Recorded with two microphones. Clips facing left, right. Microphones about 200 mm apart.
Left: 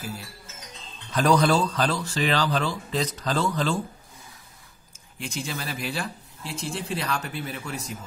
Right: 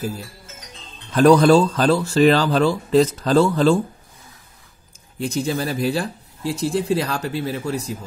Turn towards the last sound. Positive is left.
turn(degrees=-35)  # may be behind; listen again after turning